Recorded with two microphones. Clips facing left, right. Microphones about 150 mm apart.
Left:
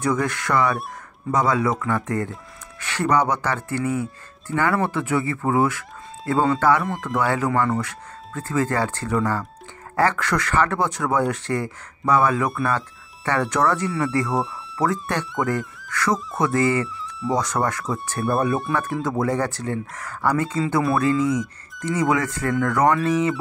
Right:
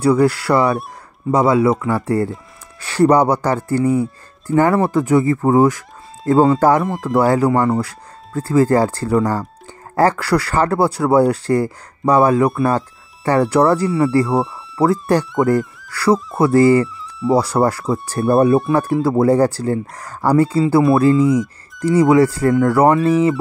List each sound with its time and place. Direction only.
0.0 s speech: 35° right (ahead or behind)
14.3 s speech: centre (ahead or behind)
14.8 s speech: 35° right (ahead or behind)